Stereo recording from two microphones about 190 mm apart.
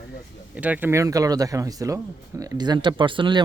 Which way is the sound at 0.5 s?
5° right (ahead or behind).